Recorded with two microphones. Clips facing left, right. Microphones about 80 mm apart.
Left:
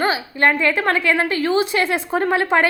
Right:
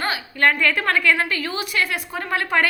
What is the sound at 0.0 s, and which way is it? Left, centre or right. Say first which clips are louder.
A woman's voice: left 3 dB; left.